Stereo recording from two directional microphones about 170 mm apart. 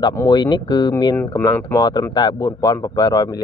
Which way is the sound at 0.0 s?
20° left (ahead or behind).